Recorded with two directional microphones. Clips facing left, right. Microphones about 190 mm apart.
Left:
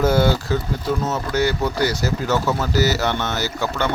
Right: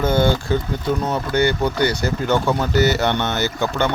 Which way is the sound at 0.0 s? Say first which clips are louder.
Even; 5° left (ahead or behind).